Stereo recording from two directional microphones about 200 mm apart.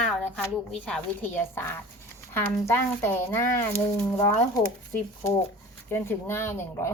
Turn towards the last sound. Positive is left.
turn(degrees=10)  # may be behind; listen again after turning